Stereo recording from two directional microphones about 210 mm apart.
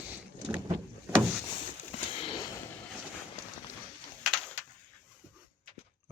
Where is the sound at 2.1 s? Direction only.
25° left (ahead or behind).